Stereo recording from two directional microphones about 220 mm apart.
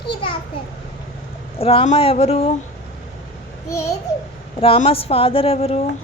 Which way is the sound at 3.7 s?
15° left (ahead or behind).